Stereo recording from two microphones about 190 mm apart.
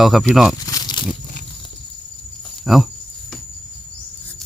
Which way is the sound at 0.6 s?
20° left (ahead or behind).